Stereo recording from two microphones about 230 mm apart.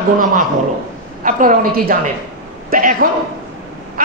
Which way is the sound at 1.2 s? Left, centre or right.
Right.